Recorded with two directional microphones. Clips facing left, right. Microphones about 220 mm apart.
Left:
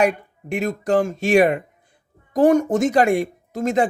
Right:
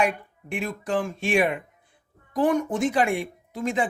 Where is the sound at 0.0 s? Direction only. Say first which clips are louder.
Left 6 dB; 40° left (ahead or behind).